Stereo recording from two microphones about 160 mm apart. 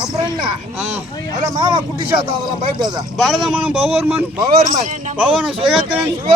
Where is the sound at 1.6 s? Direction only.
30° right (ahead or behind).